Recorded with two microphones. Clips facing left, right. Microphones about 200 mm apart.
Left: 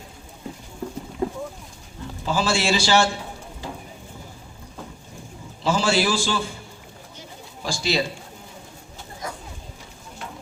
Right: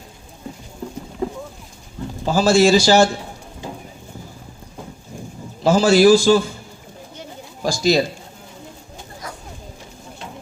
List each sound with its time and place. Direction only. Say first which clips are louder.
2.2 s a man's voice: right 9 dB; 40° right (ahead or behind)
5.6 s a man's voice: right 9 dB; 40° right (ahead or behind)
7.2 s a sound: right 9 dB; 40° right (ahead or behind)